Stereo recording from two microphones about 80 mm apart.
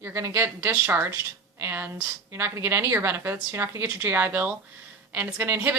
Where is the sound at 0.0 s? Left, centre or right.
Right.